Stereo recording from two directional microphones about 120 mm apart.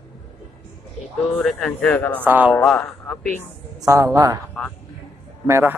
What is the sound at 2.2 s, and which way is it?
Speech, 15° right (ahead or behind).